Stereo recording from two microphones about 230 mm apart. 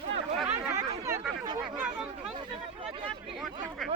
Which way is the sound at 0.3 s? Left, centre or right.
Centre.